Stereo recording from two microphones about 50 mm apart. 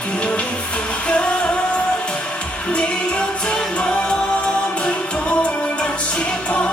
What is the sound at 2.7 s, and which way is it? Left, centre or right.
Music, centre.